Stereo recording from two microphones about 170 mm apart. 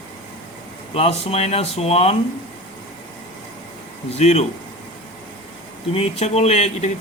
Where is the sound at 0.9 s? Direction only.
35° left (ahead or behind).